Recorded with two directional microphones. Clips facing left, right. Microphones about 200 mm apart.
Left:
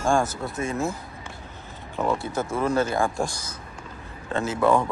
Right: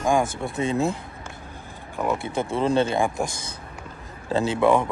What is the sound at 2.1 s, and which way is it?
Speech, 25° right (ahead or behind).